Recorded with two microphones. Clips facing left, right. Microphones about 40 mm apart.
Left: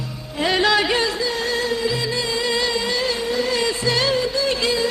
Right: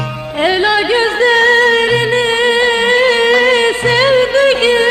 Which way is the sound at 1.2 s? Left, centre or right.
Right.